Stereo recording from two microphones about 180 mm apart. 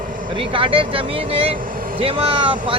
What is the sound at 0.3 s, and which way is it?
Speech, 30° right (ahead or behind).